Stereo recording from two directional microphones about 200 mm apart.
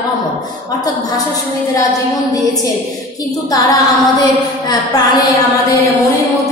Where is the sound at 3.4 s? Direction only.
20° left (ahead or behind).